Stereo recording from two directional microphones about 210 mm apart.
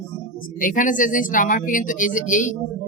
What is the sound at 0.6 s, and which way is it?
Speech, 40° left (ahead or behind).